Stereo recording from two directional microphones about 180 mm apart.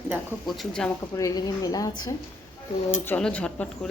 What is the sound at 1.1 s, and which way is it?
Speech, 20° left (ahead or behind).